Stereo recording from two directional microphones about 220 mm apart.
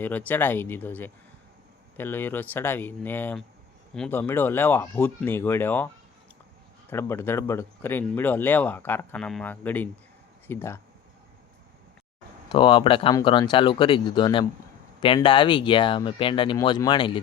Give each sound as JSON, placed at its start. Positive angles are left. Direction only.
{"t": 0.0, "sound": "speech", "side_deg": 10}
{"t": 6.9, "sound": "speech", "side_deg": 10}
{"t": 12.5, "sound": "speech", "side_deg": 25}